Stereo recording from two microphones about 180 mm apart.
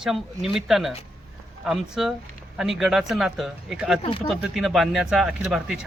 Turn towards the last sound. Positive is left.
turn(degrees=-5)  # may be behind; listen again after turning